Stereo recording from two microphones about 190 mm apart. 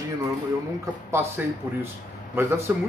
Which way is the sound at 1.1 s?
10° right (ahead or behind).